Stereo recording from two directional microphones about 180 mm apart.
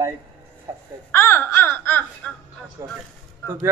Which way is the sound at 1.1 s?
10° left (ahead or behind).